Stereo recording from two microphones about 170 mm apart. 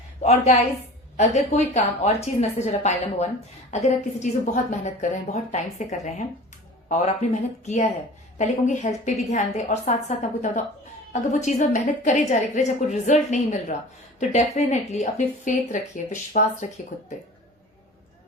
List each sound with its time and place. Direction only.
0.2 s a woman's voice: 40° left (ahead or behind)